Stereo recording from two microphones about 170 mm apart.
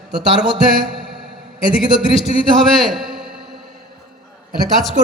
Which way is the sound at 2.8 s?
Centre (ahead or behind).